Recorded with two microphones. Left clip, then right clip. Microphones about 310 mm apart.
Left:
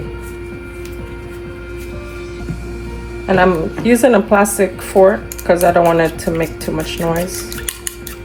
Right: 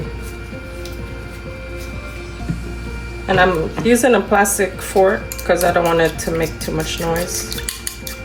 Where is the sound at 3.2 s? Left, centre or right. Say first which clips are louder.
Left 2 dB; centre.